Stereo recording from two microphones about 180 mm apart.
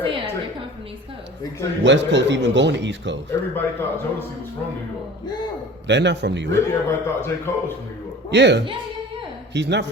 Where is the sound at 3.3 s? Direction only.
15° left (ahead or behind).